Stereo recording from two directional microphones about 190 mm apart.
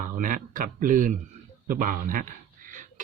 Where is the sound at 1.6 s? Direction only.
45° right (ahead or behind).